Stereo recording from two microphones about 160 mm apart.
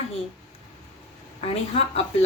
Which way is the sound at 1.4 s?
40° left (ahead or behind).